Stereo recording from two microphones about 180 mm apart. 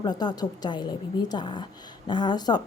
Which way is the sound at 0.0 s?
25° left (ahead or behind).